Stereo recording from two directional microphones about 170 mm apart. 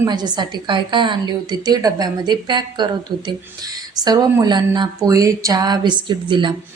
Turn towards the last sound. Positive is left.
turn(degrees=-30)  # may be behind; listen again after turning